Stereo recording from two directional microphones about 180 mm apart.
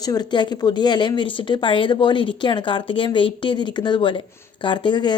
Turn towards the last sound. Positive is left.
turn(degrees=25)  # may be behind; listen again after turning